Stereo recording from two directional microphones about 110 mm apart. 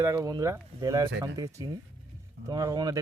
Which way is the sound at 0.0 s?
30° right (ahead or behind).